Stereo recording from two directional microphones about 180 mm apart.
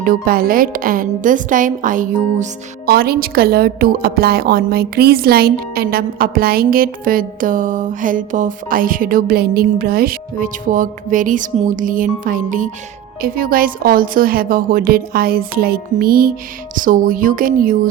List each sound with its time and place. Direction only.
0.0 s a woman's voice: 50° right (ahead or behind)